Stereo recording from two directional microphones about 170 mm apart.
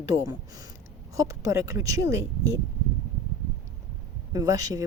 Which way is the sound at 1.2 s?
20° right (ahead or behind).